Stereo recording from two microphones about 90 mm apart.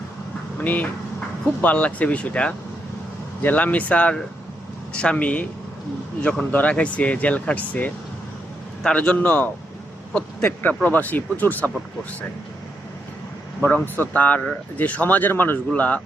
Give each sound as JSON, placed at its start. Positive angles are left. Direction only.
{"t": 0.6, "sound": "speech", "side_deg": 20}
{"t": 6.5, "sound": "speech", "side_deg": 15}
{"t": 13.6, "sound": "speech", "side_deg": 20}